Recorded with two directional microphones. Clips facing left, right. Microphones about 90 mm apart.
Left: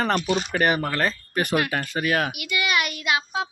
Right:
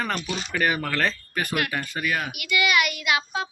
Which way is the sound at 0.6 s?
20° left (ahead or behind).